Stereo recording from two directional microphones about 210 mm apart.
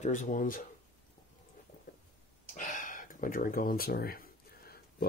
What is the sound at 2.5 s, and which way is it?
Speech, 40° left (ahead or behind).